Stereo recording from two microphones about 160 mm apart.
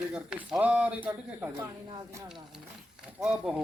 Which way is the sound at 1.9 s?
20° right (ahead or behind).